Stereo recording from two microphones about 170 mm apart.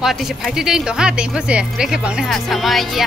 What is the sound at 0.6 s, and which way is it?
Speech, 5° right (ahead or behind).